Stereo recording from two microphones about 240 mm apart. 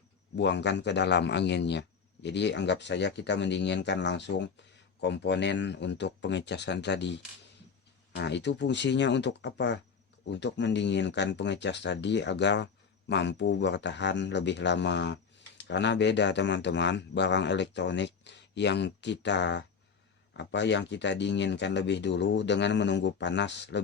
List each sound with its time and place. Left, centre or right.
0.3 s speech: left